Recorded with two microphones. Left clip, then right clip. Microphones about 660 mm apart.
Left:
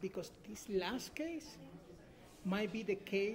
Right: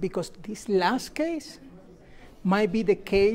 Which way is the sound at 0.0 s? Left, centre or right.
Right.